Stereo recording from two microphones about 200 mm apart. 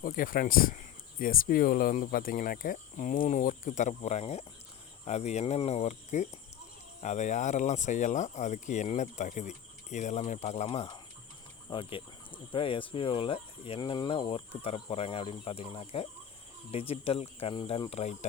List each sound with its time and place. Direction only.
0.0 s speech: 45° left (ahead or behind)